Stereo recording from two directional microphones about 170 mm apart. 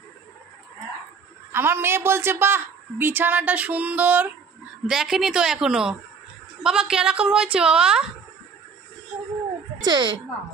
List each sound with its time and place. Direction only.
1.5 s a woman's voice: 15° right (ahead or behind)
9.8 s speech: 25° right (ahead or behind)